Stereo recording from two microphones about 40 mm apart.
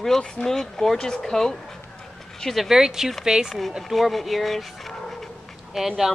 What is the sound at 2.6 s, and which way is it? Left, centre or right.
Speech, centre.